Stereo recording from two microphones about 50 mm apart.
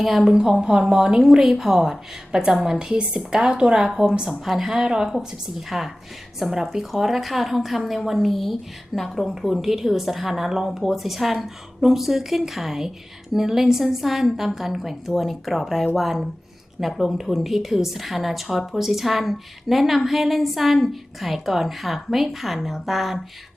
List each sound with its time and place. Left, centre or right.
0.0 s a woman's voice: centre
0.6 s a woman's voice: centre